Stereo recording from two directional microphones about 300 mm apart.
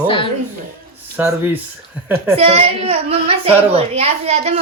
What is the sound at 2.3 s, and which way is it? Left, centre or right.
A child's voice, centre.